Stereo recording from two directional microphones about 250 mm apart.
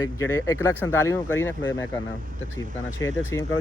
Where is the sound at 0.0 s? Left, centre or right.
Centre.